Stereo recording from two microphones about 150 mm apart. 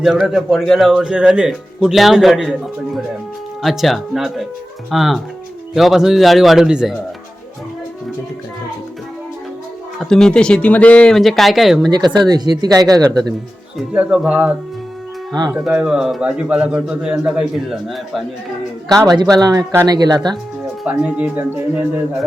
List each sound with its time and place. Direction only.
0.0 s speech: centre (ahead or behind)
10.0 s speech: 5° left (ahead or behind)
11.9 s speech: 30° right (ahead or behind)
13.7 s speech: 5° right (ahead or behind)
15.3 s speech: 25° right (ahead or behind)
15.5 s speech: 5° right (ahead or behind)
19.0 s speech: 25° right (ahead or behind)
20.8 s speech: 5° right (ahead or behind)